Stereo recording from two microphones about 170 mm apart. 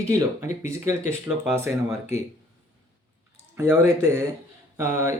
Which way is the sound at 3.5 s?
15° right (ahead or behind).